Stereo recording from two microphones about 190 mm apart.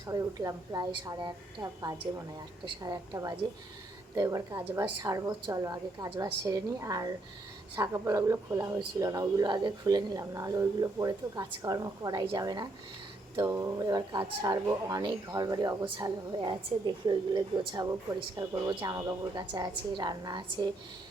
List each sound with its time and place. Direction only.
0.0 s a woman's voice: 15° right (ahead or behind)